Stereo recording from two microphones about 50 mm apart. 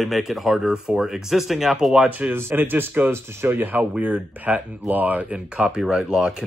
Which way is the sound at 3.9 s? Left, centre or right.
Right.